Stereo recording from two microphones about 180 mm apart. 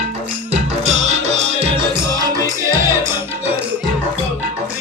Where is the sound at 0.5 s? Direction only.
40° right (ahead or behind).